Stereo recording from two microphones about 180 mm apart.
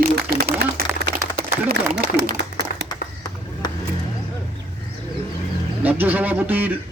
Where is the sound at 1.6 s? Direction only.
55° right (ahead or behind).